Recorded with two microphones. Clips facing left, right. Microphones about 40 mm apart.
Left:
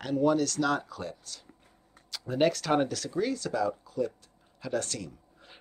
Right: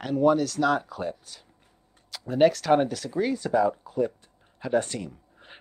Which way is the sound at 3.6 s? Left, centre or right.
Right.